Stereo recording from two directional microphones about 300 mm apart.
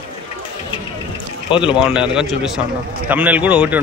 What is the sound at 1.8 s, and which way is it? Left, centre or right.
A man's voice, centre.